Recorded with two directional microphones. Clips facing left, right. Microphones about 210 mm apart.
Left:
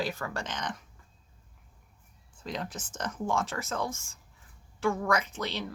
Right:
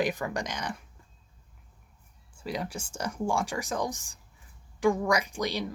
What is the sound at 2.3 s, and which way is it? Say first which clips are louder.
Speech: right 3 dB; 10° right (ahead or behind).